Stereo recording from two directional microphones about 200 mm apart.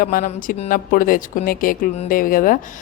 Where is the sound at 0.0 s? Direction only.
45° left (ahead or behind).